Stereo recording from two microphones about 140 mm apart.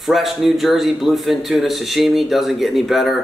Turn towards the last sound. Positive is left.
turn(degrees=0)  # may be behind; listen again after turning